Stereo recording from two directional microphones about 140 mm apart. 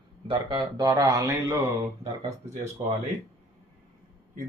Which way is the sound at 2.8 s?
30° right (ahead or behind).